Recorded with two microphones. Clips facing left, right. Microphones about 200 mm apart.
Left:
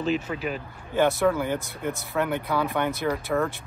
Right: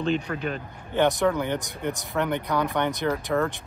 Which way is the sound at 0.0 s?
5° left (ahead or behind).